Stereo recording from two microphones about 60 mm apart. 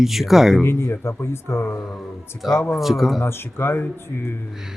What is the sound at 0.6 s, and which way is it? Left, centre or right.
Speech, left.